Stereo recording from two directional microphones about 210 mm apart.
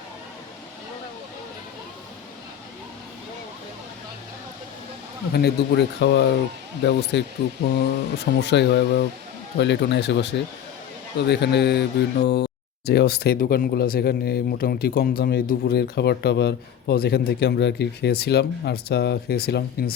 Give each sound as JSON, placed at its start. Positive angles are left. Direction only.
{"t": 5.3, "sound": "speech", "side_deg": 50}